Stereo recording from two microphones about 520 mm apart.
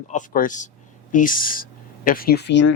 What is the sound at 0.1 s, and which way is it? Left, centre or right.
Speech, centre.